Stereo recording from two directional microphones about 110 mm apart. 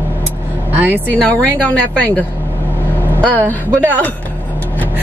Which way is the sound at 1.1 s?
10° left (ahead or behind).